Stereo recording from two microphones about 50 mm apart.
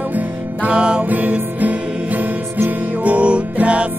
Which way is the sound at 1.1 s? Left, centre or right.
Right.